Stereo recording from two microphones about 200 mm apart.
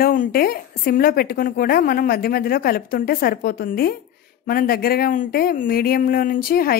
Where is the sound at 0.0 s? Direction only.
45° left (ahead or behind).